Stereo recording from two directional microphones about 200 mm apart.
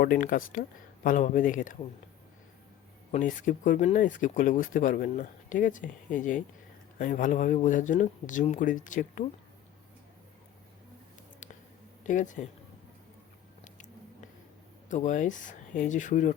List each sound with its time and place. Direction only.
0.0 s speech: 45° left (ahead or behind)
3.1 s speech: 40° left (ahead or behind)
12.0 s speech: 40° left (ahead or behind)
14.8 s speech: 40° left (ahead or behind)